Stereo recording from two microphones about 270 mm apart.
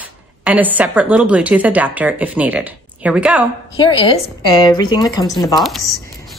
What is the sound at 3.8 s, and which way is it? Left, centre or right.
Speech, centre.